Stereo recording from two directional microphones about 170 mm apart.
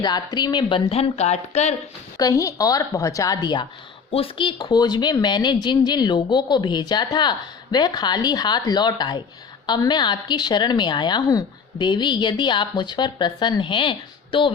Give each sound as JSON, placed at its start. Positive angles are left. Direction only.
{"t": 0.0, "sound": "speech", "side_deg": 25}
{"t": 2.1, "sound": "a woman's voice", "side_deg": 20}